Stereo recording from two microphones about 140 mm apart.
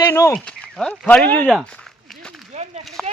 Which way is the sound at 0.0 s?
20° left (ahead or behind).